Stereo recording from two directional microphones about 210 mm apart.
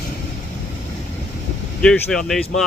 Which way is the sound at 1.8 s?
5° left (ahead or behind).